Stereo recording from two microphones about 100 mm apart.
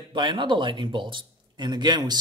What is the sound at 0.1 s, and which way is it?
Speech, 50° right (ahead or behind).